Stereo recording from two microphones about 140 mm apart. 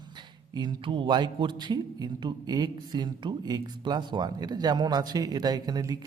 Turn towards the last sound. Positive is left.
turn(degrees=-25)  # may be behind; listen again after turning